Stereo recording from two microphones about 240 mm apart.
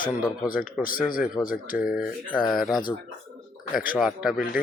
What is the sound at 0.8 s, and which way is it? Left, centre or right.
Speech, left.